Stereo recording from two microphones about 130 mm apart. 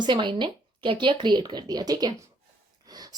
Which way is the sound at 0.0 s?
35° right (ahead or behind).